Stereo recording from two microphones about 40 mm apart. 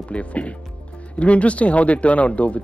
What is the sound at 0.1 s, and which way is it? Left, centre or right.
Speech, left.